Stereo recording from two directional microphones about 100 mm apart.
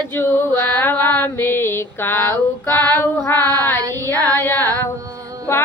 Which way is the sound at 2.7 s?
40° right (ahead or behind).